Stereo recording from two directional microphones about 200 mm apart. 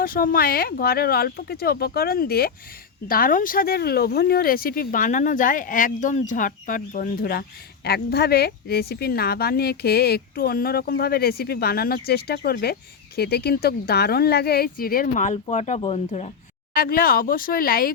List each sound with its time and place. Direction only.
0.0 s a woman's voice: 45° left (ahead or behind)
16.7 s a woman's voice: 45° left (ahead or behind)